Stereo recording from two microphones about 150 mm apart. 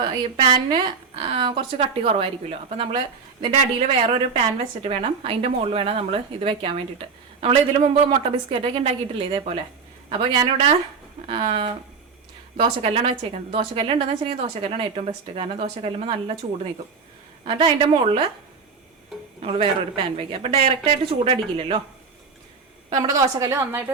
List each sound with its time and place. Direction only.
0.0 s a woman's voice: 30° right (ahead or behind)
17.4 s a woman's voice: 40° right (ahead or behind)
20.1 s a woman's voice: 40° right (ahead or behind)
22.9 s a woman's voice: 25° right (ahead or behind)